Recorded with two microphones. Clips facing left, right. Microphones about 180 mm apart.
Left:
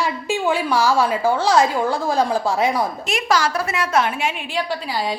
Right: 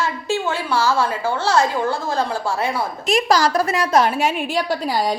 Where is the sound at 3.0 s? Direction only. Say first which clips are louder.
Right 7 dB; 35° right (ahead or behind).